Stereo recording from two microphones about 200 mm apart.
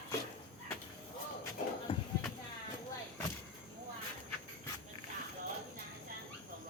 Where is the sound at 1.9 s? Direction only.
25° left (ahead or behind).